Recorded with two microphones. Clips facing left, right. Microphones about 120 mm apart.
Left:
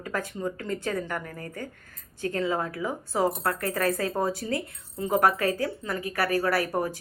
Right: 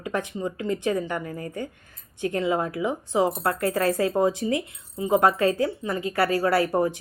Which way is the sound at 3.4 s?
25° right (ahead or behind).